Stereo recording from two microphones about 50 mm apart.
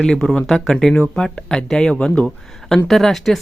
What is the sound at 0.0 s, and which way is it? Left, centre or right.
Speech, centre.